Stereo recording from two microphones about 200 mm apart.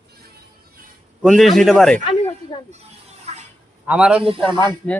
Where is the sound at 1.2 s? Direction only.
Centre (ahead or behind).